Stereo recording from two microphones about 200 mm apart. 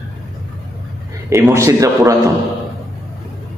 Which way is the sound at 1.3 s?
15° right (ahead or behind).